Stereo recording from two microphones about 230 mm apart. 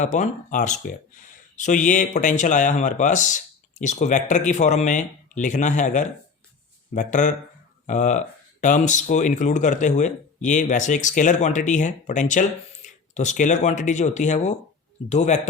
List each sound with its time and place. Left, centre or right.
0.0 s speech: left